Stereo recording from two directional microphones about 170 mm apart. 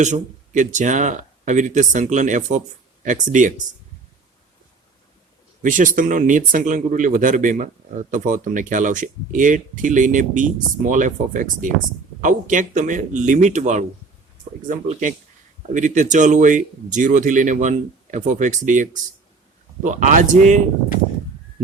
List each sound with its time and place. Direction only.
0.0 s speech: 45° right (ahead or behind)
5.6 s speech: 50° right (ahead or behind)